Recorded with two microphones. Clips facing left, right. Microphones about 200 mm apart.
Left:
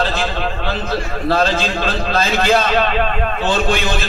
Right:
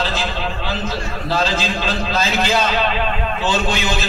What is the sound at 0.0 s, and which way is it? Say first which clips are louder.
A man's voice: left 3 dB; 55° left (ahead or behind).